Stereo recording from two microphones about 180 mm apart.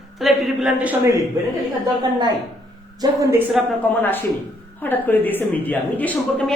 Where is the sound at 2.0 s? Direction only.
25° right (ahead or behind).